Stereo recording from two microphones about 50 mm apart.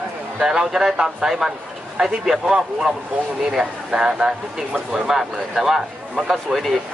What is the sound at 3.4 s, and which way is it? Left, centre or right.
Speech, centre.